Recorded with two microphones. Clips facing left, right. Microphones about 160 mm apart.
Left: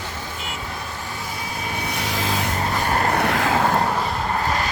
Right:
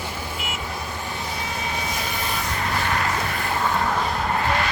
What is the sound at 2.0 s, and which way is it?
Vehicle, 90° left.